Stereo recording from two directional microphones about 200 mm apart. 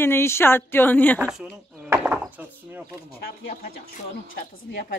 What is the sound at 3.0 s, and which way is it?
Speech, 45° left (ahead or behind).